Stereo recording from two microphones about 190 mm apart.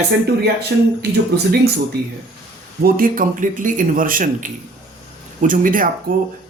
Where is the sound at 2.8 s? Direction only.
45° right (ahead or behind).